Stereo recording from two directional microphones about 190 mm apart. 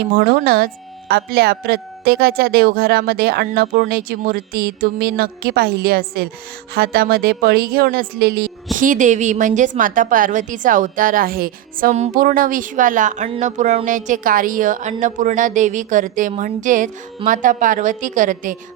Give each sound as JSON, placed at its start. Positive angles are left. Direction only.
{"t": 0.0, "sound": "speech", "side_deg": -55}